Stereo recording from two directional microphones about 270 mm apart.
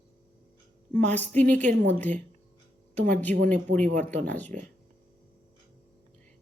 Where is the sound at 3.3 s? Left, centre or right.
Centre.